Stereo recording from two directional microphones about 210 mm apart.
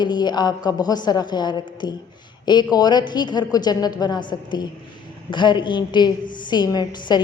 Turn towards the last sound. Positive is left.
turn(degrees=20)  # may be behind; listen again after turning